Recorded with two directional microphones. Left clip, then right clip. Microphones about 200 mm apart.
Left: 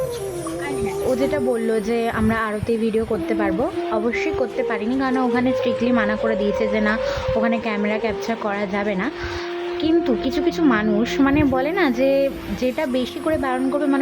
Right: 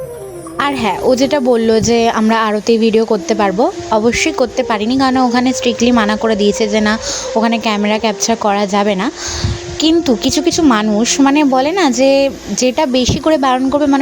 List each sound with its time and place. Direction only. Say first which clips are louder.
1.1 s speech: right 8 dB; 40° right (ahead or behind)